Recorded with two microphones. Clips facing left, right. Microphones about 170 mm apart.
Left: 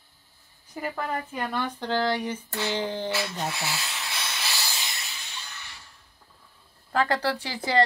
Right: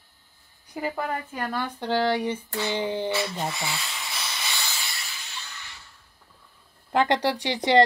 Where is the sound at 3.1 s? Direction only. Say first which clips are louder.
Right 2 dB; centre (ahead or behind).